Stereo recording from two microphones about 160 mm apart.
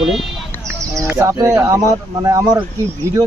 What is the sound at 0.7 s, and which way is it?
Bird, 20° right (ahead or behind).